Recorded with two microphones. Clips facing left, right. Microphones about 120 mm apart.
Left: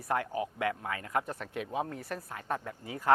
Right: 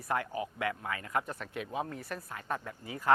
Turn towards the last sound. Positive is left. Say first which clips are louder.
# left 1 dB
turn(degrees=45)  # may be behind; listen again after turning